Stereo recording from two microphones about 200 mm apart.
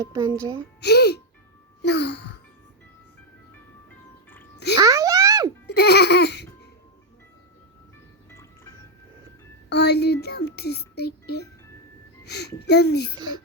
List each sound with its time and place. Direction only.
0.0 s a child's voice: 15° right (ahead or behind)
0.8 s speech: 55° left (ahead or behind)
1.8 s music: 55° left (ahead or behind)
4.8 s a sound: 15° right (ahead or behind)
5.6 s baby laughter: 55° left (ahead or behind)
8.3 s music: 15° left (ahead or behind)
9.6 s a child's voice: 55° left (ahead or behind)